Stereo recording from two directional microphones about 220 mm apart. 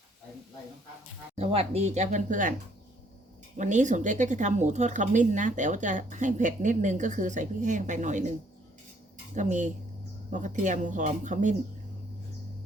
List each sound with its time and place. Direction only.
1.4 s a woman's voice: 25° right (ahead or behind)
3.6 s a woman's voice: 35° right (ahead or behind)
9.3 s a woman's voice: 35° right (ahead or behind)